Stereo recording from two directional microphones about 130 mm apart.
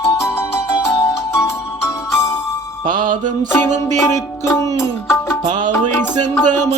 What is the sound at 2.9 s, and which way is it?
Music, 90° right.